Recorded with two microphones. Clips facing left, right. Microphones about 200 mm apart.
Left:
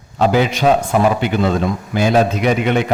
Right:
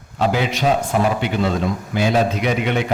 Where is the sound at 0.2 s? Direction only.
45° left (ahead or behind).